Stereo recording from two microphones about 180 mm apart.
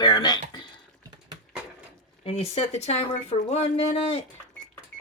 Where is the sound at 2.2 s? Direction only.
35° left (ahead or behind).